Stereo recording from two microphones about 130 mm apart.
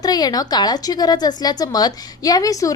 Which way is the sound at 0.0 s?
30° left (ahead or behind).